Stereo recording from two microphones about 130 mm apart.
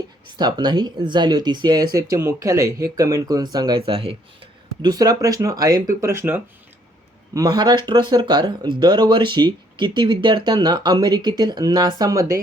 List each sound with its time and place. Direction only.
0.3 s speech: 35° right (ahead or behind)
4.8 s speech: 30° right (ahead or behind)
7.3 s speech: 30° right (ahead or behind)